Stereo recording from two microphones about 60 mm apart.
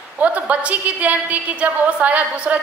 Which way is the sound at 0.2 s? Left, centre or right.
Right.